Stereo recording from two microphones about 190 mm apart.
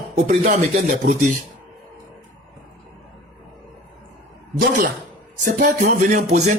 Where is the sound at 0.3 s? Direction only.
40° right (ahead or behind).